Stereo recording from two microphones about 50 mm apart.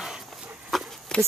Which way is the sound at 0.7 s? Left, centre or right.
Centre.